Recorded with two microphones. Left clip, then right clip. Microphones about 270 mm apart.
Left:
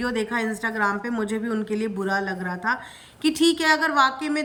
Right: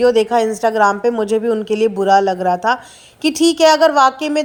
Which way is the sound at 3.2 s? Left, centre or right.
Centre.